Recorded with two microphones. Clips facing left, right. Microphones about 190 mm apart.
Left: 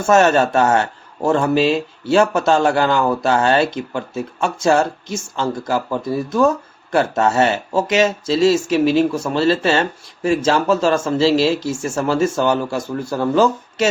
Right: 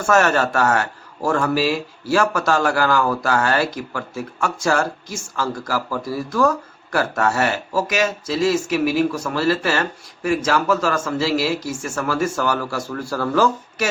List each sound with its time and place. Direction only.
0.0 s speech: 20° left (ahead or behind)